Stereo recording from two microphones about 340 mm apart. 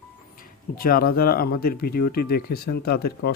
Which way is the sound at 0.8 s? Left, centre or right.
Left.